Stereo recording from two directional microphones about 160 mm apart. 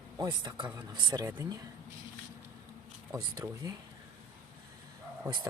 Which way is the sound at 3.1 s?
20° right (ahead or behind).